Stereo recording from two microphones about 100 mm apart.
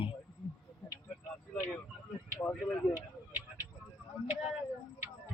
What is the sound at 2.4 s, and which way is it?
Speech, 10° left (ahead or behind).